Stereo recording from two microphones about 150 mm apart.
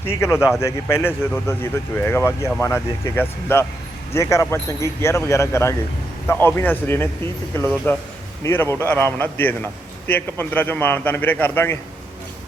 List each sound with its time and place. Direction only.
0.0 s speech: 15° left (ahead or behind)